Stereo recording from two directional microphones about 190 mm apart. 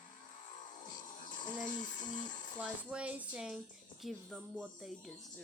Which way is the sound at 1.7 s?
45° left (ahead or behind).